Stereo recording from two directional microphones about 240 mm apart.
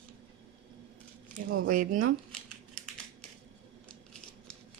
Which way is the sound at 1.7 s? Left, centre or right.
Right.